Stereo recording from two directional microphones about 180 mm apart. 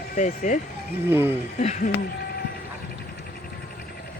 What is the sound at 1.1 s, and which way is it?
Speech, 10° right (ahead or behind).